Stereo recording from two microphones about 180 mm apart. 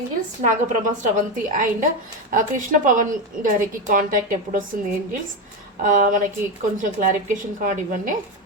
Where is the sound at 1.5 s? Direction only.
45° right (ahead or behind).